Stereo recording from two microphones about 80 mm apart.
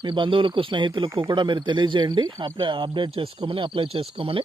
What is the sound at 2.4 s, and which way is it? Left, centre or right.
Speech, right.